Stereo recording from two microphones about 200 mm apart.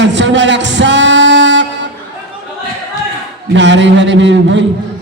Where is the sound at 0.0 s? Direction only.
60° right (ahead or behind).